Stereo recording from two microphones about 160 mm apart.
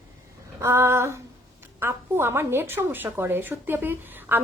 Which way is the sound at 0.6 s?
15° right (ahead or behind).